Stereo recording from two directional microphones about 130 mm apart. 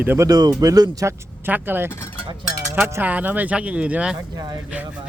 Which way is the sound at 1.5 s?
15° right (ahead or behind).